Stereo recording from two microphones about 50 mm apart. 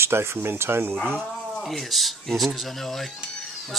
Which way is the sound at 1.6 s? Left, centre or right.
Centre.